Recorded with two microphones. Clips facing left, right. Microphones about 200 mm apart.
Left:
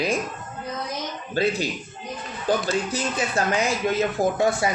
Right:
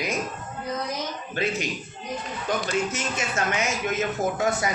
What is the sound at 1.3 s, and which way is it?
A man's voice, 35° left (ahead or behind).